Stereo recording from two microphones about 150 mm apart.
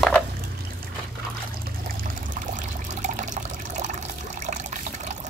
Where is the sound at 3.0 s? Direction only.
55° right (ahead or behind).